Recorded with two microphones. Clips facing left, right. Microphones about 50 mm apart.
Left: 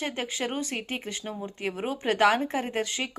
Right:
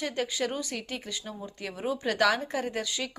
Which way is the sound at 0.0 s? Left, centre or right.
Left.